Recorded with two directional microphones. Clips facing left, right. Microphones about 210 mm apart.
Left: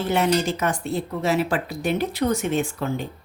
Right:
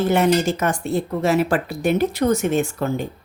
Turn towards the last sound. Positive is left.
turn(degrees=-45)  # may be behind; listen again after turning